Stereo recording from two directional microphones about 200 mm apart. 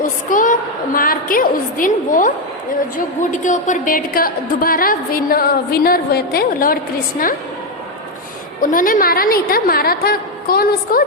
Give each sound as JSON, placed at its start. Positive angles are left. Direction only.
{"t": 0.0, "sound": "a sound", "side_deg": 40}
{"t": 0.9, "sound": "a woman's voice", "side_deg": 45}
{"t": 3.4, "sound": "a woman's voice", "side_deg": 40}
{"t": 8.6, "sound": "a woman's voice", "side_deg": 45}